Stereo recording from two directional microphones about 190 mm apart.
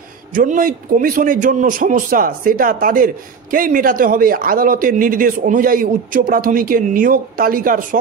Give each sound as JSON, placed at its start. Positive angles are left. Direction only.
{"t": 0.3, "sound": "a man's voice", "side_deg": -45}